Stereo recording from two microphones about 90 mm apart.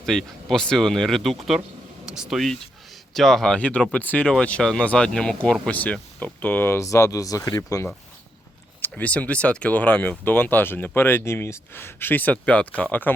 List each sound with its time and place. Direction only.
0.0 s speech: 5° left (ahead or behind); by 6.8 s 25° left (ahead or behind)
6.8 s speech: 35° left (ahead or behind)
8.8 s speech: 15° left (ahead or behind)